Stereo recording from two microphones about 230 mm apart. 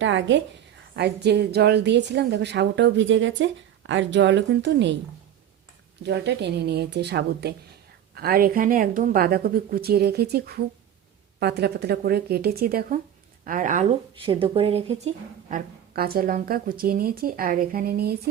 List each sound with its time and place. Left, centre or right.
0.0 s a woman's voice: right
6.0 s a woman's voice: right
14.3 s a woman's voice: right